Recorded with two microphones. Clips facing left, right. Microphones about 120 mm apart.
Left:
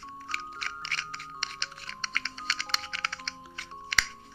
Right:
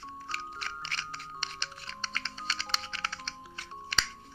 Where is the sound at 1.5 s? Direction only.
35° right (ahead or behind).